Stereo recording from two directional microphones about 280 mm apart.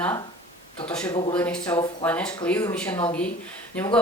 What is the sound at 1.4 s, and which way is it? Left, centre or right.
A woman's voice, centre.